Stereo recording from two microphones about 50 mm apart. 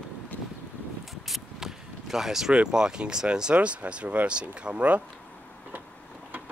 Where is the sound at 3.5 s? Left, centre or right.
Right.